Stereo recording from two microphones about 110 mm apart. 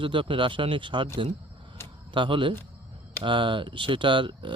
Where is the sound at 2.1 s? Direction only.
50° right (ahead or behind).